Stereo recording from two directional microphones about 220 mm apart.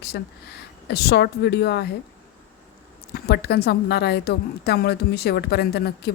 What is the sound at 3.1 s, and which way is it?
Speech, 45° left (ahead or behind).